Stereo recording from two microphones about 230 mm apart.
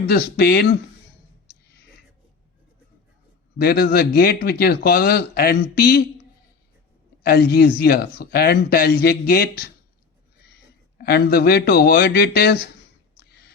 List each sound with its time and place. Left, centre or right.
0.1 s speech: left
3.6 s speech: left
7.2 s speech: left
10.9 s speech: left
13.1 s a sound: left